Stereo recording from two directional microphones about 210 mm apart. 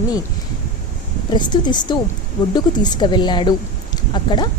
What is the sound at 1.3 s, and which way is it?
Speech, 20° left (ahead or behind).